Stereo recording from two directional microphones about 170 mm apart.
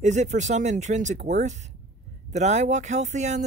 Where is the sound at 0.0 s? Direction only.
45° right (ahead or behind).